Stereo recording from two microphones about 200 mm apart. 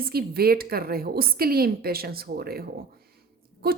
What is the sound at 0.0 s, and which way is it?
A woman's voice, 50° right (ahead or behind).